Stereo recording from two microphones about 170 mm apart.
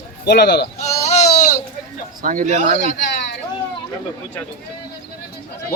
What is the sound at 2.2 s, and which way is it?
Speech, 55° right (ahead or behind).